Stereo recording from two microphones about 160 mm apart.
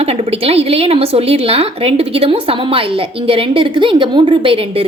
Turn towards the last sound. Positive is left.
turn(degrees=-35)  # may be behind; listen again after turning